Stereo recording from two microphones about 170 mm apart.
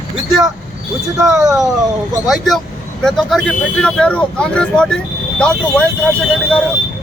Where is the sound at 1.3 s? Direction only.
20° right (ahead or behind).